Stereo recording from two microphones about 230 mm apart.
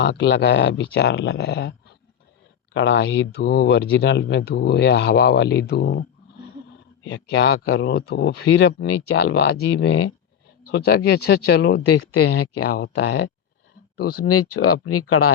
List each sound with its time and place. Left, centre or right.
0.0 s speech: left
2.7 s speech: left
12.2 s speech: left
12.7 s speech: left
14.6 s speech: left